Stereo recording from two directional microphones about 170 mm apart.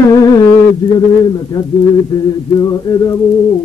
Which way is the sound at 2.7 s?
20° left (ahead or behind).